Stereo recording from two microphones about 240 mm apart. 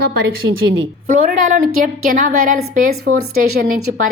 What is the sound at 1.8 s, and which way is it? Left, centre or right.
A woman's voice, right.